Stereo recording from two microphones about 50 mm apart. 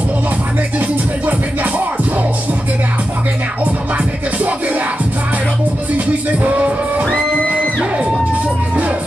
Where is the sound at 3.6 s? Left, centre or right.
Right.